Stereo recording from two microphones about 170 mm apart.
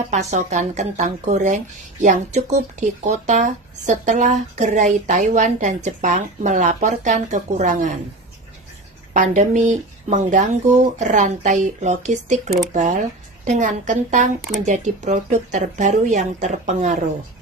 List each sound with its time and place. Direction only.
0.1 s speech: 45° right (ahead or behind)
9.1 s speech: 50° right (ahead or behind)